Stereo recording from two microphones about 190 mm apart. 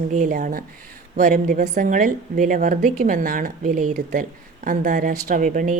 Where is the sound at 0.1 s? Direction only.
40° right (ahead or behind).